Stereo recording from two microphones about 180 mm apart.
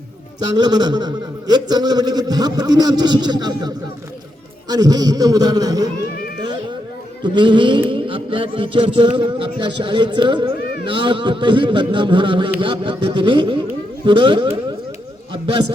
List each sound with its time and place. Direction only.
0.5 s a man's voice: 25° right (ahead or behind)
4.7 s a man's voice: 20° right (ahead or behind)
7.2 s a man's voice: 25° right (ahead or behind)